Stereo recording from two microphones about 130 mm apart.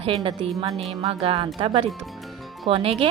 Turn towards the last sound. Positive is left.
turn(degrees=-45)  # may be behind; listen again after turning